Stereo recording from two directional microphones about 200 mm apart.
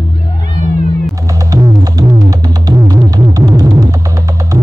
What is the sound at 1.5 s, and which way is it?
Music, 15° right (ahead or behind).